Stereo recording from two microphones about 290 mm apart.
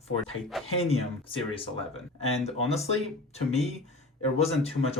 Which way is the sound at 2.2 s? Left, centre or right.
Left.